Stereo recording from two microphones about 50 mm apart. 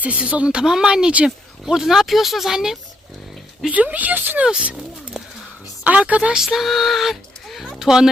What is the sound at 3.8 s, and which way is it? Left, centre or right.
Speech, right.